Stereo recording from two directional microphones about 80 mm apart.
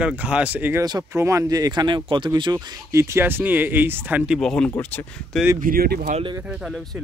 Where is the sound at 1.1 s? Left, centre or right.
Right.